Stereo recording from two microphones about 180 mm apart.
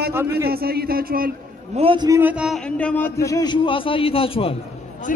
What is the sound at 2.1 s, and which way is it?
A man's voice, 10° right (ahead or behind).